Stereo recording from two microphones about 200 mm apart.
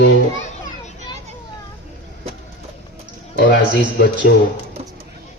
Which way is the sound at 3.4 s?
55° left (ahead or behind).